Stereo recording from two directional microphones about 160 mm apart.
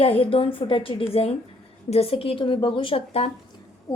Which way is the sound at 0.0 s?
35° left (ahead or behind).